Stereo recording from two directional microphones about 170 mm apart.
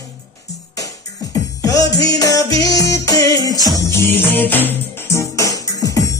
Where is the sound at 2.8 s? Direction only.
20° left (ahead or behind).